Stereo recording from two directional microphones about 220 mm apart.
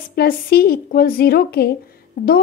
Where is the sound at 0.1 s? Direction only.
45° left (ahead or behind).